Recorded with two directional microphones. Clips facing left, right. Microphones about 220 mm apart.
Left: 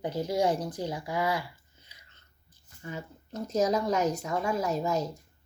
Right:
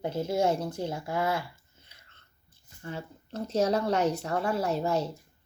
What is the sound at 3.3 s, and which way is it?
Speech, 30° right (ahead or behind).